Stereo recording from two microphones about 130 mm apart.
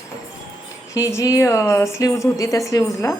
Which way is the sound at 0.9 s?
25° left (ahead or behind).